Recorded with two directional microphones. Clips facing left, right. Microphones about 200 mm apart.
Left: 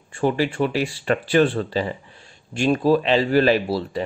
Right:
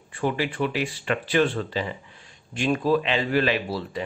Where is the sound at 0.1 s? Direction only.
35° left (ahead or behind).